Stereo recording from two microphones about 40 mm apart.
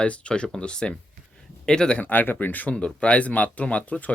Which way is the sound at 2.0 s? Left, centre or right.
Left.